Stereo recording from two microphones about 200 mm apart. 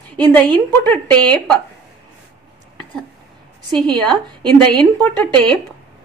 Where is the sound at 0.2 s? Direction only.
10° left (ahead or behind).